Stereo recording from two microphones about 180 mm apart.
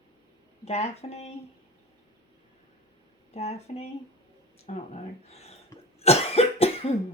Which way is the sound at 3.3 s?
35° left (ahead or behind).